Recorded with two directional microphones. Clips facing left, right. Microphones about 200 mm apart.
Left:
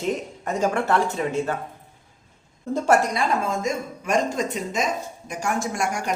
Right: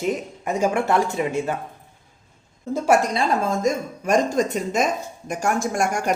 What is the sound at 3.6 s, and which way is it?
A woman's voice, 40° right (ahead or behind).